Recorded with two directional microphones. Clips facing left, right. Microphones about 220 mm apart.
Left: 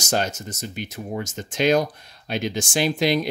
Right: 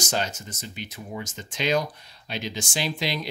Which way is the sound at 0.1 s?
45° left (ahead or behind).